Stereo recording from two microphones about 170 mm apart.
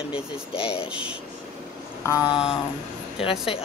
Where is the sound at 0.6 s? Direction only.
35° left (ahead or behind).